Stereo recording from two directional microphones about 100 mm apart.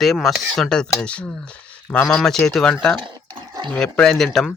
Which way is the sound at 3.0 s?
50° right (ahead or behind).